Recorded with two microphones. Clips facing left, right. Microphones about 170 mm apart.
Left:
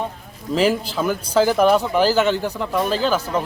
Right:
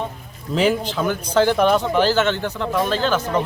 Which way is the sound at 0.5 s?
Centre (ahead or behind).